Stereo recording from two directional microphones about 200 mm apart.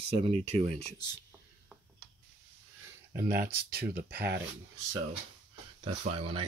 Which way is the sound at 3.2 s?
50° right (ahead or behind).